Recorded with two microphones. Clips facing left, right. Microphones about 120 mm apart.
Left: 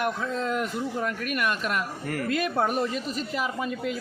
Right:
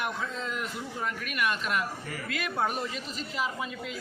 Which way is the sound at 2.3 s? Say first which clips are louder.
Left 5 dB; 45° left (ahead or behind).